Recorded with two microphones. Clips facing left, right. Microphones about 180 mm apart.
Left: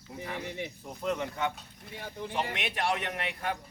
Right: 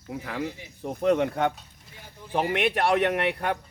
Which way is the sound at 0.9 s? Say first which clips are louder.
Right 11 dB; 65° right (ahead or behind).